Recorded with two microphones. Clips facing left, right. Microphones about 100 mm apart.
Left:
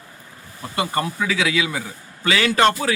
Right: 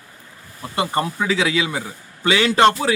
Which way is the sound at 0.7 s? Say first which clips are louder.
Right 2 dB; 25° right (ahead or behind).